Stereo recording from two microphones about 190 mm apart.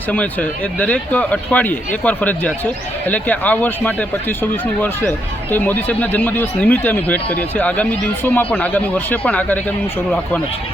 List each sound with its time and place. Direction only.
0.1 s speech: 10° left (ahead or behind)